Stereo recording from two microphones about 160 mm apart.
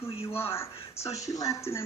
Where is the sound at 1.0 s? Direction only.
20° left (ahead or behind).